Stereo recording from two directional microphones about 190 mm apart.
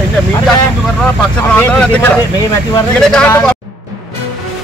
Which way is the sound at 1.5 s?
10° left (ahead or behind).